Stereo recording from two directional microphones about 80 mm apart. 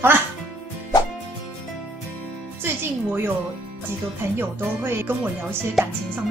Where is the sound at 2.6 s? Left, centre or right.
Right.